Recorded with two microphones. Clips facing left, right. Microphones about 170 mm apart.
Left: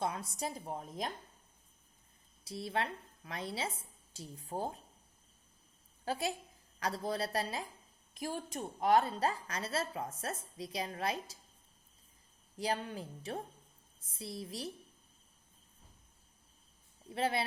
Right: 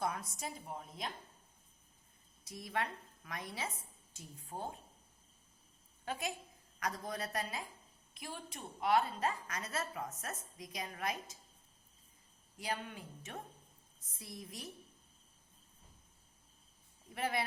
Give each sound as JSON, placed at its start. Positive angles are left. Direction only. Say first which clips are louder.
{"t": 0.0, "sound": "a woman's voice", "louder": "left 2 dB", "side_deg": 25}
{"t": 2.4, "sound": "a woman's voice", "louder": "left 3 dB", "side_deg": 30}
{"t": 6.1, "sound": "a woman's voice", "louder": "left 4 dB", "side_deg": 35}
{"t": 8.1, "sound": "a woman's voice", "louder": "left 8 dB", "side_deg": 45}
{"t": 12.5, "sound": "a woman's voice", "louder": "left 5 dB", "side_deg": 35}
{"t": 17.2, "sound": "a woman's voice", "louder": "left 3 dB", "side_deg": 30}